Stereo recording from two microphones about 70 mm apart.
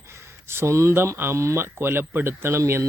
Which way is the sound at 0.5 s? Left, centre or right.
Right.